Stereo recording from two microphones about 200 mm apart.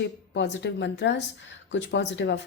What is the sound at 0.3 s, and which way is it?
Speech, 65° left (ahead or behind).